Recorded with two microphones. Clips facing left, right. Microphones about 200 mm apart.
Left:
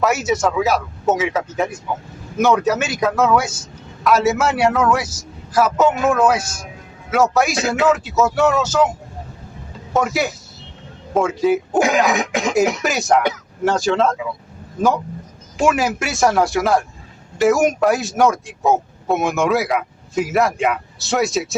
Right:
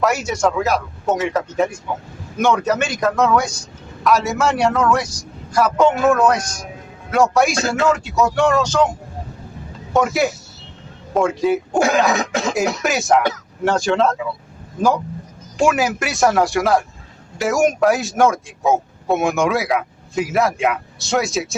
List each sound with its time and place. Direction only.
0.0 s speech: centre (ahead or behind)
9.9 s speech: centre (ahead or behind)
12.0 s speech: 15° left (ahead or behind)
12.8 s speech: centre (ahead or behind)
15.5 s speech: centre (ahead or behind)